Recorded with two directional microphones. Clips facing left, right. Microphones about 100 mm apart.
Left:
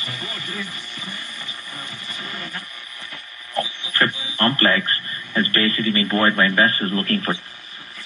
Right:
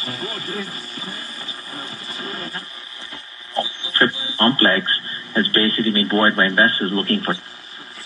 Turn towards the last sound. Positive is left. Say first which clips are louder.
# right 2 dB
turn(degrees=-30)  # may be behind; listen again after turning